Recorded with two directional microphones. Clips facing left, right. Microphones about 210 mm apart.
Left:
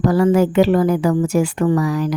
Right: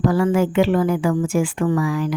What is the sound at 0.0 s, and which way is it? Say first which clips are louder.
A woman's voice: left 3 dB; 40° left (ahead or behind).